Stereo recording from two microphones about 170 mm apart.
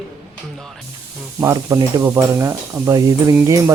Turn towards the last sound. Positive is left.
turn(degrees=-20)  # may be behind; listen again after turning